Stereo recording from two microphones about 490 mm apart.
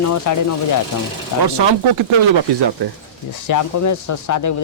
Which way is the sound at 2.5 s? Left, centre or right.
Right.